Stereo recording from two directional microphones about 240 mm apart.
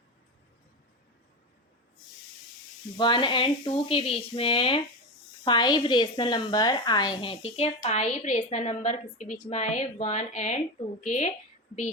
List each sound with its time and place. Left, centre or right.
3.0 s a woman's voice: centre